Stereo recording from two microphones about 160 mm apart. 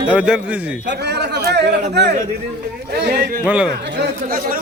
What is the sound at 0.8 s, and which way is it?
A man's voice, 90° right.